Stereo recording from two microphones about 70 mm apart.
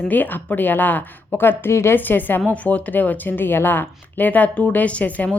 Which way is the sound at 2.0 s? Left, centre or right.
Left.